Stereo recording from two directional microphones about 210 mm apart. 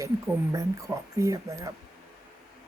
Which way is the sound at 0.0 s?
15° right (ahead or behind).